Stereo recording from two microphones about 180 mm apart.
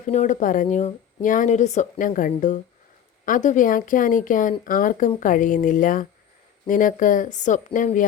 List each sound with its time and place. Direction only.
0.0 s speech: 45° left (ahead or behind)